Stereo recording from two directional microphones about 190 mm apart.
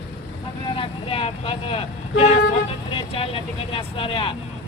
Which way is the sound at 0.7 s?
30° left (ahead or behind).